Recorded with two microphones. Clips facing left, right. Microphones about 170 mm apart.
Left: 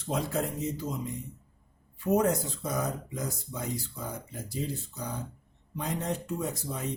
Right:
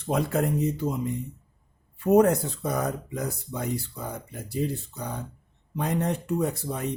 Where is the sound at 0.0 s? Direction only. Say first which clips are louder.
Right 5 dB; 60° right (ahead or behind).